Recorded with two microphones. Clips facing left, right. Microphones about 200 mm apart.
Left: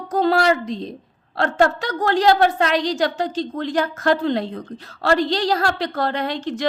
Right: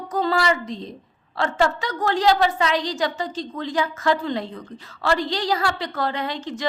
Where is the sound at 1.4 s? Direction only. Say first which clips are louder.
Left 3 dB; 55° left (ahead or behind).